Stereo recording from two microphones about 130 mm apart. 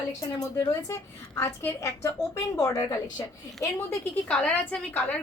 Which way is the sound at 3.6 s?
15° left (ahead or behind).